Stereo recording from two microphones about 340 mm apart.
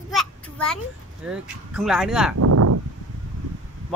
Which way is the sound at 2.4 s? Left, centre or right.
Right.